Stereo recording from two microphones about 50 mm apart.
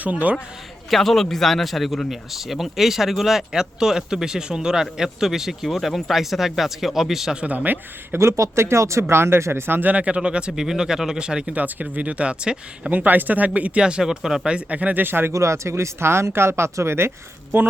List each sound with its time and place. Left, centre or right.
0.0 s speech: right
0.9 s speech: centre
7.4 s speech: right
8.2 s speech: right
9.9 s speech: right
11.5 s speech: right
13.1 s speech: right
14.0 s speech: centre
14.4 s speech: right
15.0 s speech: right
15.3 s speech: right